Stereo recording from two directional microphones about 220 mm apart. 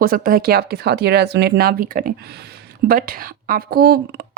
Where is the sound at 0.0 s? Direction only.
40° right (ahead or behind).